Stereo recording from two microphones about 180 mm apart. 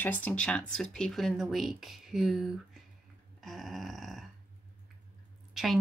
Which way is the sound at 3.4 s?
Centre (ahead or behind).